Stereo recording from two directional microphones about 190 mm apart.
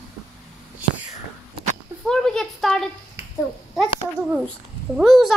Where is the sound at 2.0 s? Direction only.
Centre (ahead or behind).